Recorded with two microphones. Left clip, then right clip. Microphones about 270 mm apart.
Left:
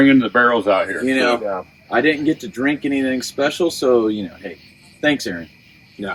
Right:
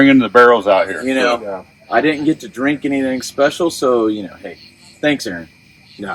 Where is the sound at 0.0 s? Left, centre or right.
Right.